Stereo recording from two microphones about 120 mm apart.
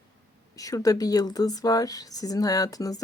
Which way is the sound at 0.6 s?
30° left (ahead or behind).